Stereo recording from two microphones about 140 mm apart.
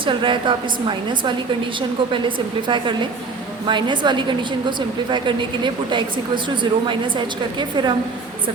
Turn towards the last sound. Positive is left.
turn(degrees=-30)  # may be behind; listen again after turning